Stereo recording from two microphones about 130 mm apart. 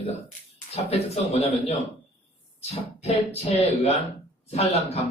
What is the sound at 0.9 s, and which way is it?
Speech, 50° left (ahead or behind).